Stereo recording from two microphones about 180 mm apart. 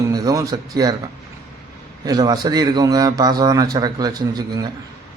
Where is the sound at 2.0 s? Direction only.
20° right (ahead or behind).